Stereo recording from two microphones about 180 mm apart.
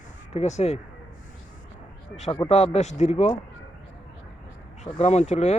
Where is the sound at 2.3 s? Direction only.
35° left (ahead or behind).